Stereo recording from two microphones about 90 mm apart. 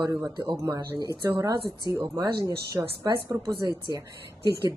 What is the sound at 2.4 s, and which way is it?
Speech, 40° right (ahead or behind).